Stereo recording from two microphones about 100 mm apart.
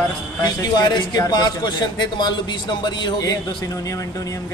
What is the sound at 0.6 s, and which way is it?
A man's voice, 45° left (ahead or behind).